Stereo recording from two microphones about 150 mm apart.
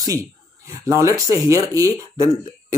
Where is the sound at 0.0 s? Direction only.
25° right (ahead or behind).